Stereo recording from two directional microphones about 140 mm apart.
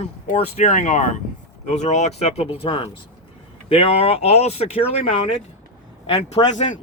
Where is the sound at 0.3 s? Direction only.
55° left (ahead or behind).